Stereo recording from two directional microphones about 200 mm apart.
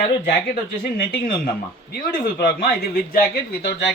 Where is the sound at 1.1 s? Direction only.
45° left (ahead or behind).